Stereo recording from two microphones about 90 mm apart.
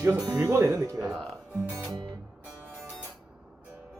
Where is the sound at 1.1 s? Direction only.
5° right (ahead or behind).